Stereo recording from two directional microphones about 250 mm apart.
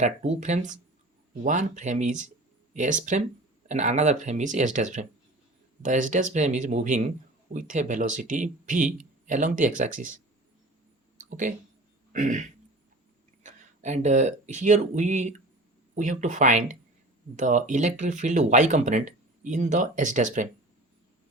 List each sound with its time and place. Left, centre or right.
0.0 s speech: right
11.2 s a sound: right
12.1 s speech: right